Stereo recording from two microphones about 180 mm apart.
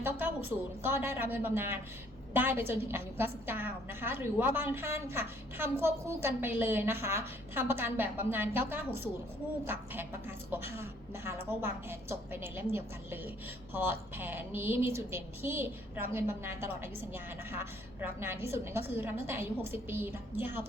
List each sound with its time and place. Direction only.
0.0 s a woman's voice: 10° right (ahead or behind)